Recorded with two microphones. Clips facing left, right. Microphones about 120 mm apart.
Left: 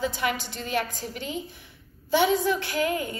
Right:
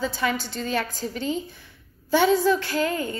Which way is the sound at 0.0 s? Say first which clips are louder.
Right 2 dB; 15° left (ahead or behind).